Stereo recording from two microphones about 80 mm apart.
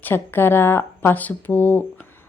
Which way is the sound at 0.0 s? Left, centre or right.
Left.